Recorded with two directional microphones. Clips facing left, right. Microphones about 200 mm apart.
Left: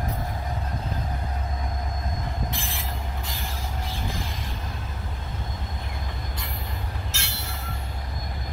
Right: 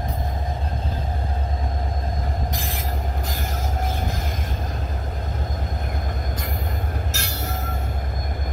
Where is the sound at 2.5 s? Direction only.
40° right (ahead or behind).